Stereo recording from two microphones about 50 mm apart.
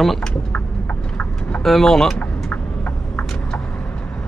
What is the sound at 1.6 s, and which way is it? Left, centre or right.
Speech, centre.